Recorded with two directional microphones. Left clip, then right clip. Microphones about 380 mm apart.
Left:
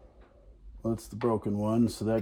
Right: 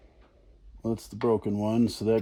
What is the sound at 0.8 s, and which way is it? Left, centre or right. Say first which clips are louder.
Speech: right 3 dB; centre.